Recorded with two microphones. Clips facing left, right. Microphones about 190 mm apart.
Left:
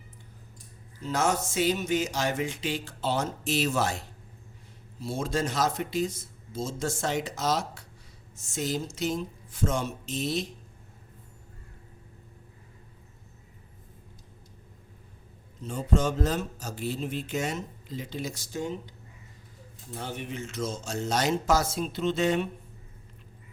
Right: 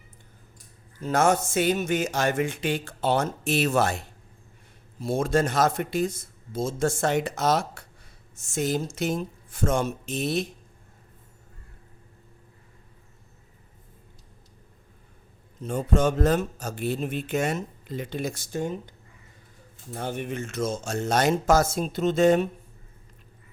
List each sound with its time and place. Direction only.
1.0 s speech: 55° right (ahead or behind)
15.6 s speech: 55° right (ahead or behind)